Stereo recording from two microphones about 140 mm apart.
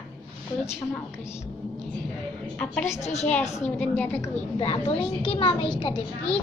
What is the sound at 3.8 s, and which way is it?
Speech, 10° left (ahead or behind).